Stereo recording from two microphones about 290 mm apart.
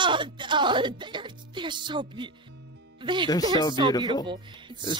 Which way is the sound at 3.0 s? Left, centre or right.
Centre.